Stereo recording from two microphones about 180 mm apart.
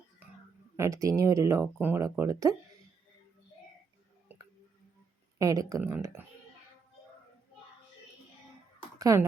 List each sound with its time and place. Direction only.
0.8 s speech: 15° right (ahead or behind)
4.3 s a sound: 10° right (ahead or behind)
5.4 s speech: 20° right (ahead or behind)
9.0 s speech: 20° right (ahead or behind)